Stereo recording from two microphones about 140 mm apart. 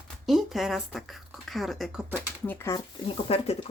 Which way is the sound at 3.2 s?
45° left (ahead or behind).